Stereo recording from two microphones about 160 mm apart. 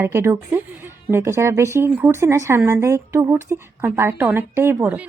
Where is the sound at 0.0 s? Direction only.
15° right (ahead or behind).